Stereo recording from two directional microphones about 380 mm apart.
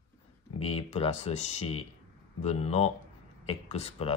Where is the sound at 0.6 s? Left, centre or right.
Centre.